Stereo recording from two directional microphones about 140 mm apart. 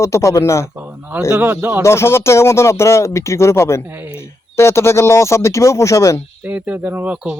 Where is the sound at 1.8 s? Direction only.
20° left (ahead or behind).